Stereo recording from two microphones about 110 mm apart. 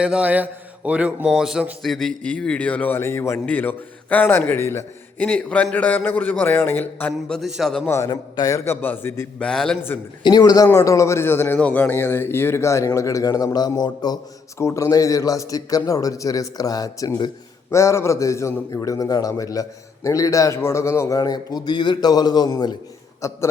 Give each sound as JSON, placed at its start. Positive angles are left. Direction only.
{"t": 0.0, "sound": "a man's voice", "side_deg": -10}
{"t": 5.2, "sound": "a man's voice", "side_deg": 10}
{"t": 7.3, "sound": "a man's voice", "side_deg": 0}
{"t": 7.9, "sound": "a man's voice", "side_deg": 25}
{"t": 9.4, "sound": "a man's voice", "side_deg": 5}
{"t": 10.2, "sound": "a man's voice", "side_deg": 35}
{"t": 23.2, "sound": "a man's voice", "side_deg": 30}